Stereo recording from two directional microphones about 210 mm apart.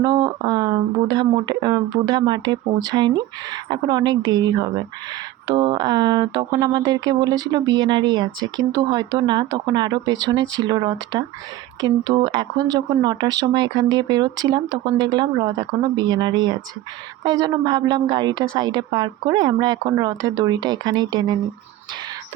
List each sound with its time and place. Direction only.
0.0 s speech: 20° right (ahead or behind)